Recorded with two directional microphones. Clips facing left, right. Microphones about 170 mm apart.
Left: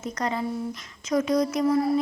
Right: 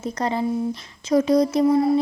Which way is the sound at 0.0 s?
30° right (ahead or behind).